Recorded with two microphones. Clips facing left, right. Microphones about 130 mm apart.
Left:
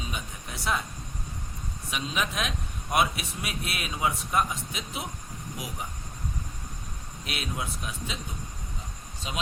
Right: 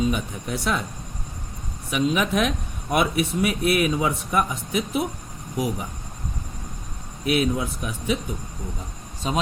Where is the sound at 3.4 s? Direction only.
55° right (ahead or behind).